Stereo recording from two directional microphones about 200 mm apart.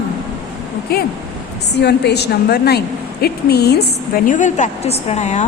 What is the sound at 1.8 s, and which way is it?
A woman's voice, 55° left (ahead or behind).